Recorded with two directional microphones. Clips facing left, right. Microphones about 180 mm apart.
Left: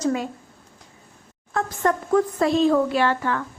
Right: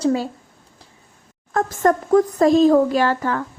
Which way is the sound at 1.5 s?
45° right (ahead or behind).